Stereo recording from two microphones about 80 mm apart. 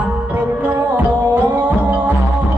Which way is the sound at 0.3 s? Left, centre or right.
Right.